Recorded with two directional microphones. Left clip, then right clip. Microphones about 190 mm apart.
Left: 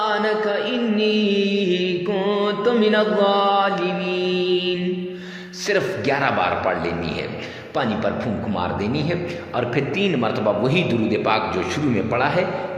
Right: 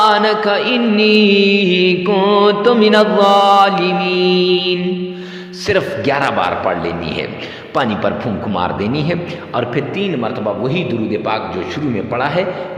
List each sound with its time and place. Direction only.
0.0 s mantra: 30° right (ahead or behind)
5.6 s a man's voice: 25° right (ahead or behind)
7.8 s mantra: 30° right (ahead or behind)
8.5 s a man's voice: 25° right (ahead or behind)
9.6 s a man's voice: 15° right (ahead or behind)
12.1 s a man's voice: 20° right (ahead or behind)